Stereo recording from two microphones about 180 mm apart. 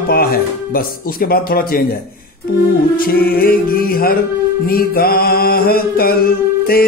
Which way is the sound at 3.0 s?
55° left (ahead or behind).